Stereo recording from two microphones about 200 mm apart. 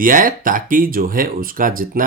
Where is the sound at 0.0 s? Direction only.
45° right (ahead or behind).